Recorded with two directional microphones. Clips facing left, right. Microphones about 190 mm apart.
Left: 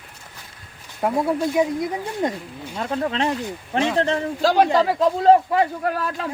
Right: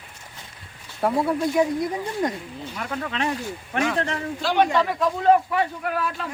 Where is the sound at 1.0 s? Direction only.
20° left (ahead or behind).